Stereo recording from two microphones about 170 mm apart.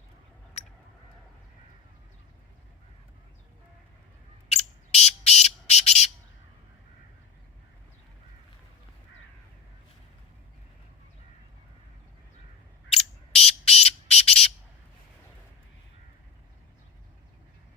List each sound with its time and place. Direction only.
4.4 s bird: 40° left (ahead or behind)
12.9 s bird: 35° left (ahead or behind)